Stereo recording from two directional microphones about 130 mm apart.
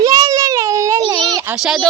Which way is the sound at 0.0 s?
25° right (ahead or behind).